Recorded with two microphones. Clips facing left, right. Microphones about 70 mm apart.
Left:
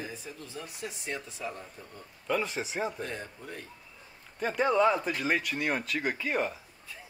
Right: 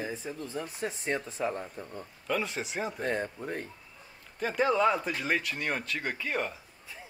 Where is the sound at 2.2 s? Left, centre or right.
Centre.